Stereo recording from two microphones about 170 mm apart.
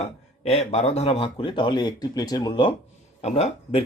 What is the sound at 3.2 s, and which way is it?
Speech, 40° left (ahead or behind).